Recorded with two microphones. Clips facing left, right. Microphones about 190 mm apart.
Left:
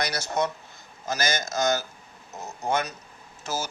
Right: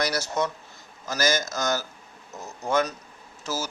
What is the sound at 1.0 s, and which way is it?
Speech, 50° left (ahead or behind).